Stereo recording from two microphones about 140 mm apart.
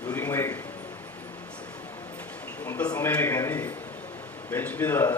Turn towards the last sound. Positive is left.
turn(degrees=15)  # may be behind; listen again after turning